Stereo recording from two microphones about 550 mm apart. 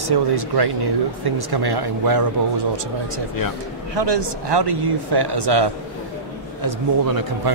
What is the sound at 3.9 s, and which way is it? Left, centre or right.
Speech, right.